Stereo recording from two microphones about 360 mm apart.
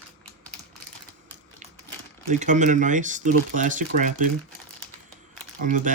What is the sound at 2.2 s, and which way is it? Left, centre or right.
Speech, right.